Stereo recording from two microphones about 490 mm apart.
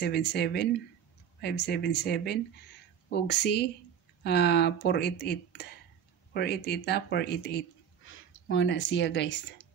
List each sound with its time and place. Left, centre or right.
0.0 s speech: centre